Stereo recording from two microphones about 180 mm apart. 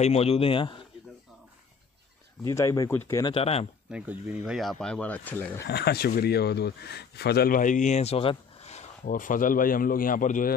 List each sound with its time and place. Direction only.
0.0 s a man's voice: 35° left (ahead or behind)
2.5 s speech: 15° left (ahead or behind)
3.3 s a man's voice: 35° left (ahead or behind)
3.9 s speech: 10° right (ahead or behind); by 5.7 s 10° left (ahead or behind)
5.7 s speech: 60° left (ahead or behind)